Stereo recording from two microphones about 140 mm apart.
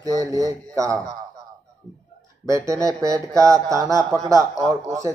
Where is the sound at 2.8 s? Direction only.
25° right (ahead or behind).